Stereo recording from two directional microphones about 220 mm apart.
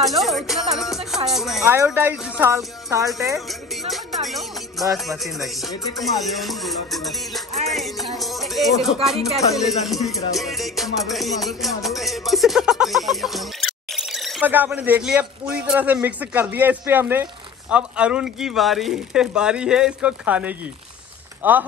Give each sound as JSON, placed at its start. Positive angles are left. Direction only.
{"t": 0.0, "sound": "music", "side_deg": 0}
{"t": 1.9, "sound": "speech", "side_deg": -5}
{"t": 3.3, "sound": "music", "side_deg": 0}
{"t": 21.4, "sound": "speech", "side_deg": -10}